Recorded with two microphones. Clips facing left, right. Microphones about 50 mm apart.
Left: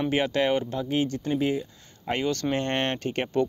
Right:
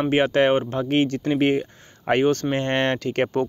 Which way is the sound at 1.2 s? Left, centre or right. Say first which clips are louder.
Right 6 dB; right.